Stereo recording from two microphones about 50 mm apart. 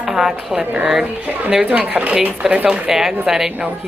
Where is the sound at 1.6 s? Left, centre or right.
Right.